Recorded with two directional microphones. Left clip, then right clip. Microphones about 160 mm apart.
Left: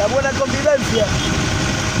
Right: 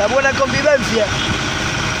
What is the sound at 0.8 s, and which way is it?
Vehicle, 40° right (ahead or behind).